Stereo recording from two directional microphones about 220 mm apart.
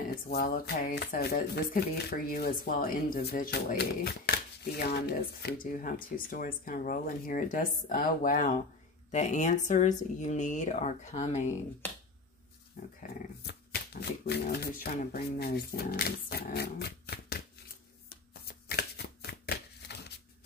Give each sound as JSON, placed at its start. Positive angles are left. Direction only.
{"t": 0.1, "sound": "speech", "side_deg": 40}
{"t": 13.4, "sound": "speech", "side_deg": 50}
{"t": 18.7, "sound": "shuffling cards", "side_deg": 45}